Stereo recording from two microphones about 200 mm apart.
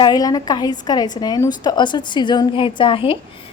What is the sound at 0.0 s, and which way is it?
A woman's voice, 20° left (ahead or behind).